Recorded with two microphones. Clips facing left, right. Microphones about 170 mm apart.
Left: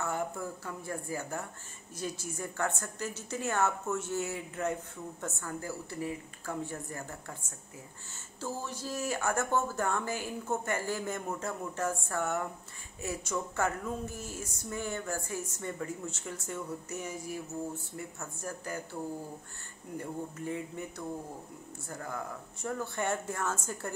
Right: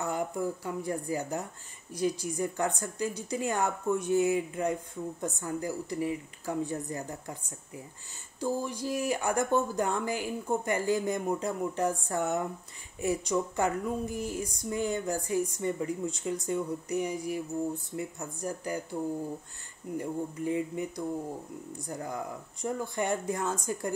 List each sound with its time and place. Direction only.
0.0 s speech: 15° right (ahead or behind)
20.0 s speech: 15° right (ahead or behind)